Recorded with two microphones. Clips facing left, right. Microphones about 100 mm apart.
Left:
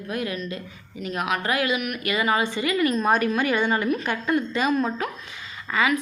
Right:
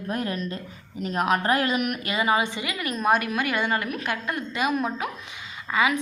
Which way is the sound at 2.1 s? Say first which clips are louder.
Left 2 dB; 20° right (ahead or behind).